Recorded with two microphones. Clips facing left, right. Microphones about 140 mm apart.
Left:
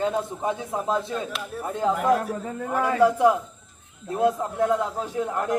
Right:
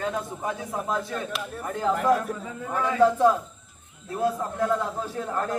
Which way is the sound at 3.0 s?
15° left (ahead or behind).